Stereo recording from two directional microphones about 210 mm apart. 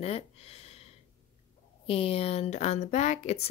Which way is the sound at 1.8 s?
25° left (ahead or behind).